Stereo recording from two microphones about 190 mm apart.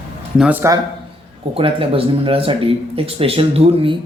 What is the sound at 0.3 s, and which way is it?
Speech, 10° right (ahead or behind).